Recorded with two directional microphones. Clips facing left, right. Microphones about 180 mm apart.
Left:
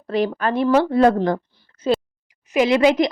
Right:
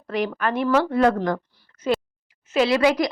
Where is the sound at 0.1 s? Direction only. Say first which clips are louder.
Left 4 dB; 30° left (ahead or behind).